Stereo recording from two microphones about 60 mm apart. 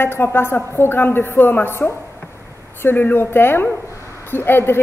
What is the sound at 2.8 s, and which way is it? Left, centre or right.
A woman's voice, left.